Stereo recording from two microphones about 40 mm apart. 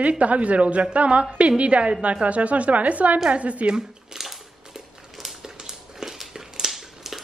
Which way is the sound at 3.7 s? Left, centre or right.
Centre.